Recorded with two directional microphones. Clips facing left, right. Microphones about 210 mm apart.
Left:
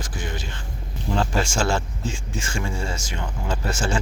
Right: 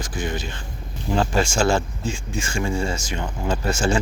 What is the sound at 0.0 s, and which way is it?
Speech, 15° right (ahead or behind).